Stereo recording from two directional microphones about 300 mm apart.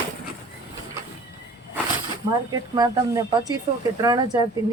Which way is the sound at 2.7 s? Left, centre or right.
Centre.